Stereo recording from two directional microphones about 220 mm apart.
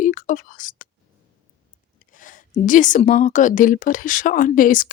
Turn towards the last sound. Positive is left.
turn(degrees=40)  # may be behind; listen again after turning